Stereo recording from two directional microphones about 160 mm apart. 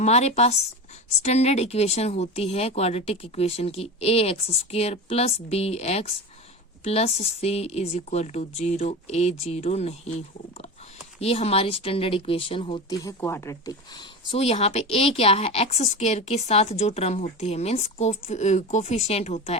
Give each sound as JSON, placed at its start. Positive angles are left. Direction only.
{"t": 0.0, "sound": "speech", "side_deg": 45}
{"t": 13.0, "sound": "speech", "side_deg": 20}